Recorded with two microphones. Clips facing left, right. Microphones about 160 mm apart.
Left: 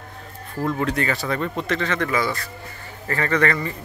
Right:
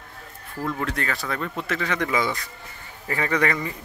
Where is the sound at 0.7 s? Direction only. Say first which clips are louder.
Left 5 dB; centre (ahead or behind).